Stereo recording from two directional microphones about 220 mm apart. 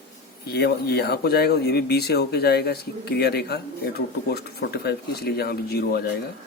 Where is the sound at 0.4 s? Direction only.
45° left (ahead or behind).